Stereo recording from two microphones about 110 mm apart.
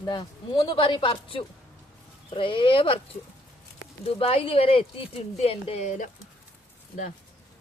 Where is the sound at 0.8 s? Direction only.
50° left (ahead or behind).